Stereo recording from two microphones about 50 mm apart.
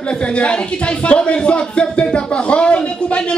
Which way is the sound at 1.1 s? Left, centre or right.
Left.